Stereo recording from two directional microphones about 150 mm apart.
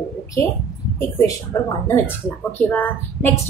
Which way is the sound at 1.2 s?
25° left (ahead or behind).